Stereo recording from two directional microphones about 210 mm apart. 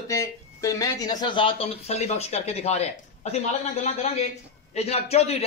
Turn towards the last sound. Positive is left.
turn(degrees=30)  # may be behind; listen again after turning